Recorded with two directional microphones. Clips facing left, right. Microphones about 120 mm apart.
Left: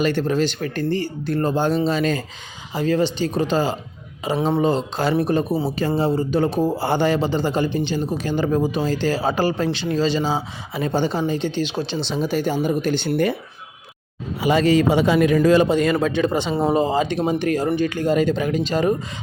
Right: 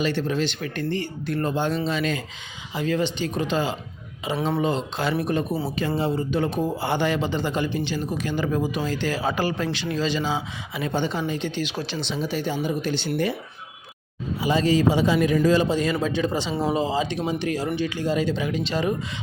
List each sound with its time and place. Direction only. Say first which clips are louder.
0.0 s speech: left 4 dB; 45° left (ahead or behind); by 12.1 s 30° left (ahead or behind)
12.1 s speech: left 5 dB; 45° left (ahead or behind)
14.4 s a man's voice: left 4 dB; 65° left (ahead or behind); by 18.9 s 45° left (ahead or behind)